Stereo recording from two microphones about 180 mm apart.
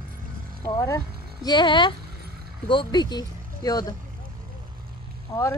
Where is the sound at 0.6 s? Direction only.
20° left (ahead or behind).